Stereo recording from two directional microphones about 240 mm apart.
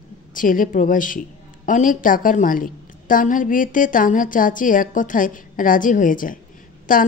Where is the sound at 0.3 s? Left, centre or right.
Left.